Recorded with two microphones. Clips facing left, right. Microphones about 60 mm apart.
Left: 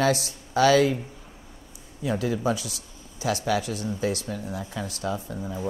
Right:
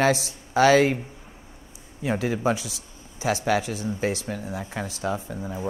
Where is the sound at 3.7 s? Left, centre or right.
Right.